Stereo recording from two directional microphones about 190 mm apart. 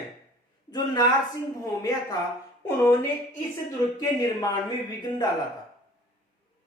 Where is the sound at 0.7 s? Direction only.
20° left (ahead or behind).